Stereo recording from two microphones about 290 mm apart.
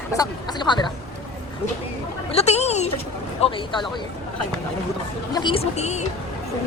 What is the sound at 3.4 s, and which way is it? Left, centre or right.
Speech, centre.